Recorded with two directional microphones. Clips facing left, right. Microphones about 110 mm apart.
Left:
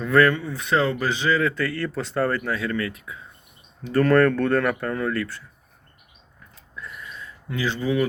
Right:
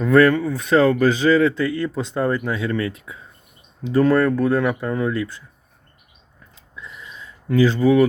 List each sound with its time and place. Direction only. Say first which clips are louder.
0.0 s speech: right 4 dB; 30° right (ahead or behind)
3.9 s speech: right 1 dB; 10° right (ahead or behind)
6.7 s a sound: left 1 dB; 15° right (ahead or behind)
7.4 s speech: right 9 dB; 40° right (ahead or behind)